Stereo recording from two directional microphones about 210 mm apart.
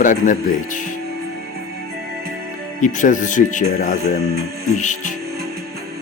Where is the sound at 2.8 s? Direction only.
35° left (ahead or behind).